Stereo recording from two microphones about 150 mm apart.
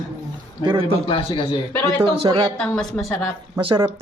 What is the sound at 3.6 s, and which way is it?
Speech, 35° right (ahead or behind).